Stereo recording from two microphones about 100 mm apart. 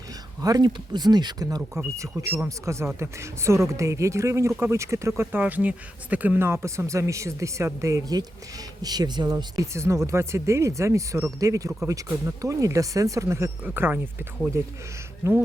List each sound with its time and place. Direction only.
0.4 s speech: 40° right (ahead or behind)
8.8 s speech: 40° right (ahead or behind); by 14.0 s 20° right (ahead or behind)
14.5 s speech: 30° right (ahead or behind)